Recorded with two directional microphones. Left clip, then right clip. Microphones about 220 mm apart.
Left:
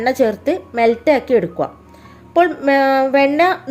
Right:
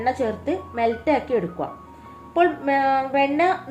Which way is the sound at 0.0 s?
50° left (ahead or behind).